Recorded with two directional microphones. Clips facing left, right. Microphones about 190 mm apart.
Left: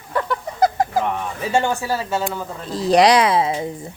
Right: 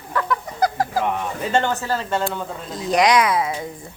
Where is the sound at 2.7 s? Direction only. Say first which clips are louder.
Left 4 dB; 35° left (ahead or behind).